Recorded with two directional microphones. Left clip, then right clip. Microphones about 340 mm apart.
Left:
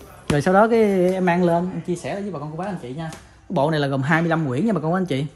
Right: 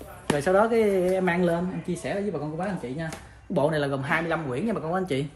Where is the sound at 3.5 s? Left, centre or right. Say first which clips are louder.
Left 4 dB; left.